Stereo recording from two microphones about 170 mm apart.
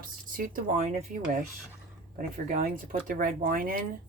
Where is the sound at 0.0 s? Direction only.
55° right (ahead or behind).